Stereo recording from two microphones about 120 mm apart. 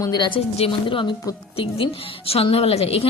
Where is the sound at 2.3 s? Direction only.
55° left (ahead or behind).